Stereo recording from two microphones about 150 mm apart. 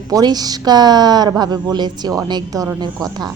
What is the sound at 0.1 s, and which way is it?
A woman's voice, 25° right (ahead or behind).